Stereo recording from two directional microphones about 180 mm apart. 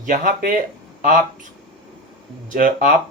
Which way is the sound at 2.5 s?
50° right (ahead or behind).